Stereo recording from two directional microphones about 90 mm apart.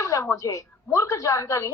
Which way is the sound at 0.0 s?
35° left (ahead or behind).